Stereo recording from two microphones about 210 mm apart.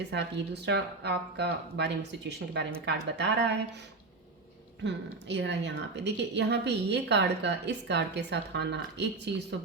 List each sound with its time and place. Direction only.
0.1 s a woman's voice: 55° right (ahead or behind)
4.8 s a woman's voice: 60° right (ahead or behind)